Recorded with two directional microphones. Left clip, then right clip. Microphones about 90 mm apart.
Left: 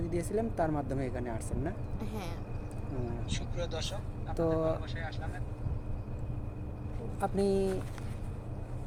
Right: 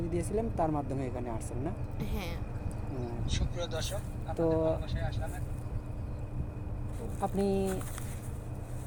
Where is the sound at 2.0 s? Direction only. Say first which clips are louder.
Right 1 dB; 30° left (ahead or behind).